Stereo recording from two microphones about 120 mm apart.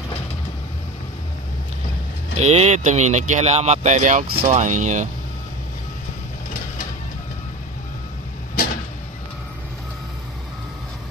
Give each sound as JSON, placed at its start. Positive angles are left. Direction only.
{"t": 2.3, "sound": "speech", "side_deg": -60}